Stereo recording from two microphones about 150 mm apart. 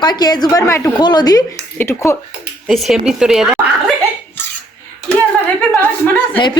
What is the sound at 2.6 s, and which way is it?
Speech, centre (ahead or behind).